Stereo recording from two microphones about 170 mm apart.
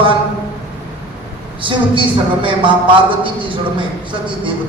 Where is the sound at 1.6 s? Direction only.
30° right (ahead or behind).